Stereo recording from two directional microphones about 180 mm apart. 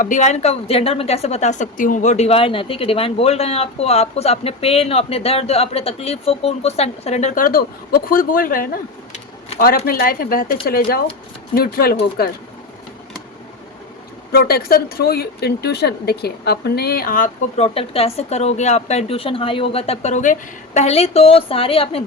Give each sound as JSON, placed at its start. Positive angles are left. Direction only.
{"t": 0.0, "sound": "a woman's voice", "side_deg": 45}
{"t": 14.3, "sound": "speech", "side_deg": 60}
{"t": 17.7, "sound": "a woman's voice", "side_deg": 35}